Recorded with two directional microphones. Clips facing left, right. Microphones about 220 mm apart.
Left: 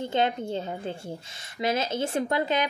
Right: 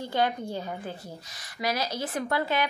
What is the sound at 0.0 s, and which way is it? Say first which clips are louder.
A woman's voice: left 2 dB; 25° left (ahead or behind).